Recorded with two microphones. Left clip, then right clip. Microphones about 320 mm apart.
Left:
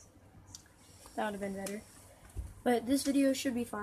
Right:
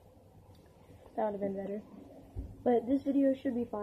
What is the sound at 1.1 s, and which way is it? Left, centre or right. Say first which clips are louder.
Speech: right 3 dB; left.